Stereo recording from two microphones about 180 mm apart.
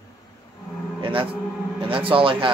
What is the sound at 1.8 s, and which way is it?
Speech, 30° right (ahead or behind).